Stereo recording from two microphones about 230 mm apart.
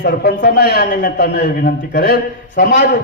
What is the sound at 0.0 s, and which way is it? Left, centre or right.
A man's voice, left.